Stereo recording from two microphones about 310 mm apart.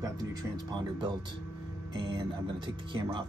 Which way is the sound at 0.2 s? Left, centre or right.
Centre.